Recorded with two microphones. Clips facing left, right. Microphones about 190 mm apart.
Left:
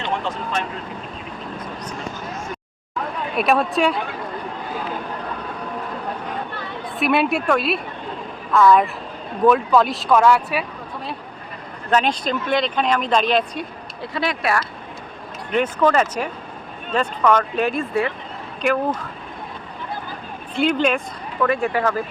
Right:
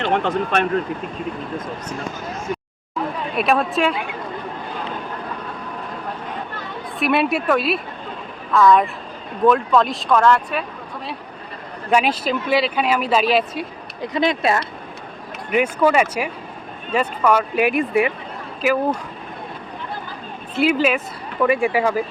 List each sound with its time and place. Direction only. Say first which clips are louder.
0.0 s speech: right 6 dB; 60° right (ahead or behind)
3.3 s speech: left 1 dB; centre (ahead or behind)
7.0 s speech: even; centre (ahead or behind)
11.9 s speech: right 1 dB; 10° right (ahead or behind)
14.0 s speech: right 4 dB; 20° right (ahead or behind)
15.4 s speech: right 1 dB; 10° right (ahead or behind)
18.6 s speech: right 1 dB; 5° right (ahead or behind)
20.6 s speech: right 1 dB; 5° right (ahead or behind)